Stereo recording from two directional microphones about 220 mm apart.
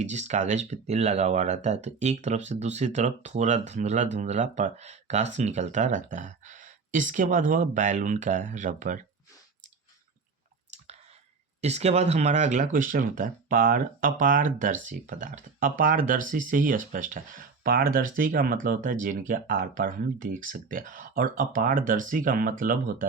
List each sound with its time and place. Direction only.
0.0 s speech: 30° right (ahead or behind)
11.6 s speech: 30° right (ahead or behind)